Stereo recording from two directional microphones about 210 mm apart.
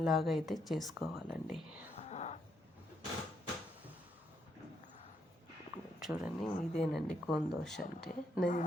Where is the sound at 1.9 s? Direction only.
30° left (ahead or behind).